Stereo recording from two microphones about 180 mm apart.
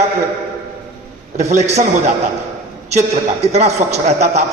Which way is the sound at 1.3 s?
40° right (ahead or behind).